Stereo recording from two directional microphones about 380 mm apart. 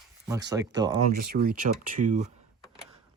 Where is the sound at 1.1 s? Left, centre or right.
Right.